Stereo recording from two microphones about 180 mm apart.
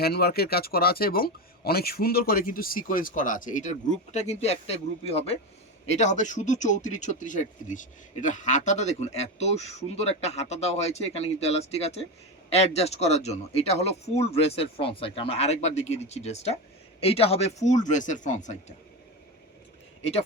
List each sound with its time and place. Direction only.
0.0 s speech: 60° left (ahead or behind); by 18.5 s 40° left (ahead or behind)